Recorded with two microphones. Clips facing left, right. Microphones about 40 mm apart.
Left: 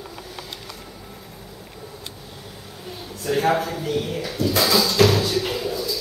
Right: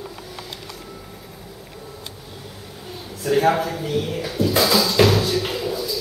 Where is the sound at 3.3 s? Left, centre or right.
Centre.